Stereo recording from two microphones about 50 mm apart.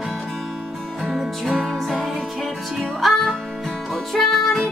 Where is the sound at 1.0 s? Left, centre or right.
Centre.